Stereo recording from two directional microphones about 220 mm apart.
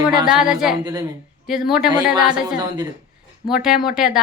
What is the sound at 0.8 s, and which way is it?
Speech, 15° right (ahead or behind).